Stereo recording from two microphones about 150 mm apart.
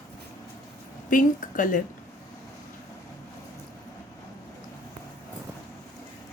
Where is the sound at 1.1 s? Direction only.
60° left (ahead or behind).